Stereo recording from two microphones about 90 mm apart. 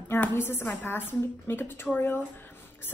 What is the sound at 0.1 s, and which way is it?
A woman's voice, 25° left (ahead or behind).